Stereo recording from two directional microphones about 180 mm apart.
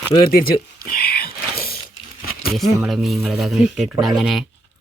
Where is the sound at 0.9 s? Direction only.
60° left (ahead or behind).